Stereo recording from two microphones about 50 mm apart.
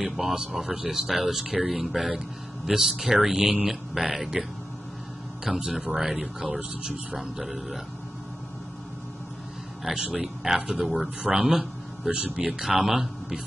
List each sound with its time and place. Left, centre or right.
0.0 s speech: centre
5.8 s speech: centre
6.8 s a man's voice: centre
7.2 s speech: centre
9.8 s a man's voice: centre